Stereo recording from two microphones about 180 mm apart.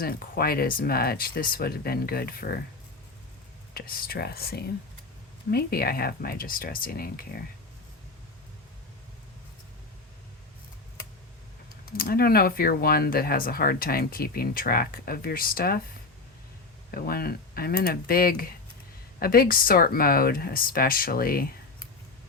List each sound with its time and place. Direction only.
0.0 s speech: 55° left (ahead or behind)
3.8 s speech: 55° left (ahead or behind)
11.9 s speech: 55° left (ahead or behind)
16.9 s speech: 55° left (ahead or behind)